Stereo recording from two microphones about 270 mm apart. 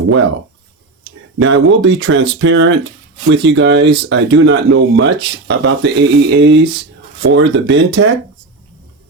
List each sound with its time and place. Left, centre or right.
1.4 s speech: right